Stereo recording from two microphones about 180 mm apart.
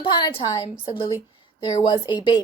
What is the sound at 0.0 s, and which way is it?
Speech, 25° left (ahead or behind).